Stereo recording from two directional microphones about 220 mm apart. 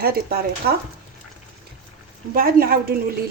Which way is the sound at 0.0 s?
45° right (ahead or behind).